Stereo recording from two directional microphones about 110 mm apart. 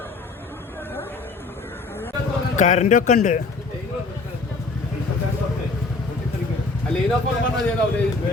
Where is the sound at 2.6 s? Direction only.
90° left.